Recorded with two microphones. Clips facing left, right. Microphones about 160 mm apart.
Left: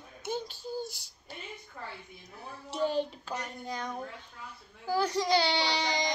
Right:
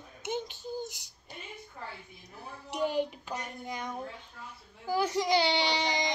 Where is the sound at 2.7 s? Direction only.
15° right (ahead or behind).